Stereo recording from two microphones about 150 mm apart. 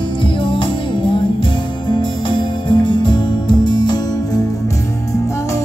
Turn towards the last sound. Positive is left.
turn(degrees=30)  # may be behind; listen again after turning